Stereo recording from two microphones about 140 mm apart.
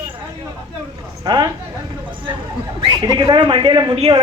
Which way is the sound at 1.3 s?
30° right (ahead or behind).